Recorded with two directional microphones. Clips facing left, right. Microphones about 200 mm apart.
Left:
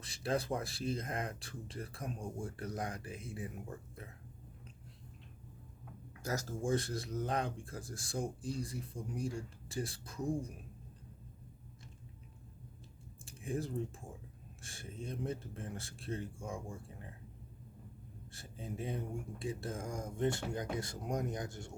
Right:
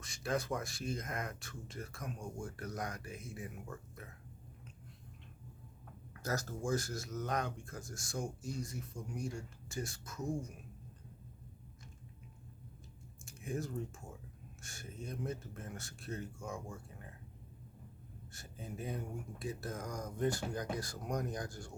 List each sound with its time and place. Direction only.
0.0 s speech: 30° left (ahead or behind)
6.2 s speech: 15° left (ahead or behind)
6.6 s speech: 30° left (ahead or behind)
13.2 s speech: 30° left (ahead or behind)
18.3 s speech: 30° left (ahead or behind)